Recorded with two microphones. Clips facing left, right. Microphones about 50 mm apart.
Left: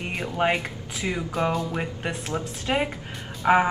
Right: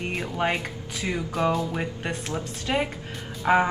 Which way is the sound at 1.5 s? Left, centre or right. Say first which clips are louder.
Even; centre.